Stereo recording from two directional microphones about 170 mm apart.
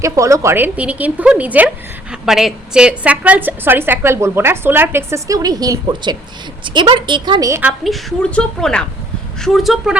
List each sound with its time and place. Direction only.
0.0 s a woman's voice: 20° right (ahead or behind)
7.6 s a woman's voice: 5° left (ahead or behind)